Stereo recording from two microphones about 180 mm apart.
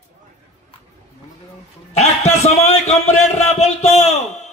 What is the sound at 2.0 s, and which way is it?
A man's voice, 40° left (ahead or behind).